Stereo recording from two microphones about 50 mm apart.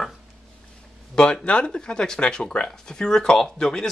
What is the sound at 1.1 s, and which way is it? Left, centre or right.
Speech, centre.